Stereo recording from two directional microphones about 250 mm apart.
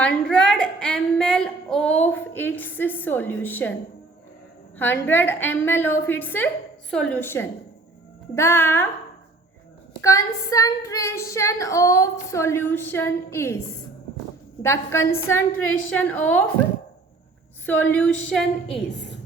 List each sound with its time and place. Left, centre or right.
0.0 s female singing: centre
4.8 s female singing: centre
10.0 s female singing: centre
17.7 s female singing: centre
18.7 s a woman's voice: left